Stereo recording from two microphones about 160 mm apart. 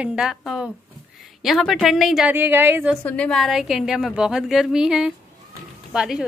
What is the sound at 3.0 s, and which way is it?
A woman's voice, 5° left (ahead or behind).